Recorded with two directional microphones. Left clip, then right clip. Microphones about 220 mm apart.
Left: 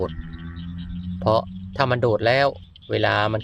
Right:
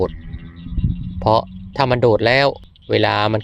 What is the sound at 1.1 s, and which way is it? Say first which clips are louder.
Speech: right 4 dB; 25° right (ahead or behind).